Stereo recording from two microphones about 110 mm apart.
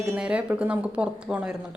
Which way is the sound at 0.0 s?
10° right (ahead or behind).